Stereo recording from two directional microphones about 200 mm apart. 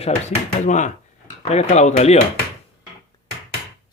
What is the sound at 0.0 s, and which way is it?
Speech, 35° left (ahead or behind).